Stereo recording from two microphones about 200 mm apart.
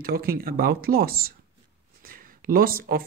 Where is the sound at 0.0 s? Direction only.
50° right (ahead or behind).